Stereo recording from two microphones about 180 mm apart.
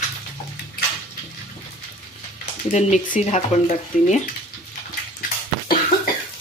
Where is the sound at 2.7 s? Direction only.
45° left (ahead or behind).